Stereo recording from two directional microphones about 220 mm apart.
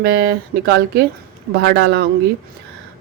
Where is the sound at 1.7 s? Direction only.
50° right (ahead or behind).